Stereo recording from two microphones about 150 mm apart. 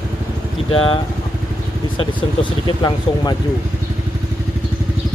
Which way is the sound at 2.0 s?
30° left (ahead or behind).